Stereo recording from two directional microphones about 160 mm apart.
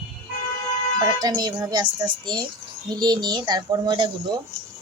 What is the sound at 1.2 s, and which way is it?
Speech, 25° right (ahead or behind).